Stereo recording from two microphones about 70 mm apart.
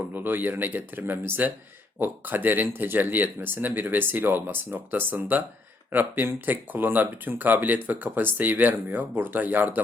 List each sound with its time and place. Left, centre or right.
0.1 s speech: right